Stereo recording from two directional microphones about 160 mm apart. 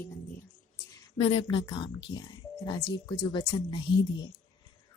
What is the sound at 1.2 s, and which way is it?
Speech, 35° left (ahead or behind).